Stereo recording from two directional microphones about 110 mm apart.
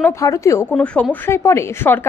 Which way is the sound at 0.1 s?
30° left (ahead or behind).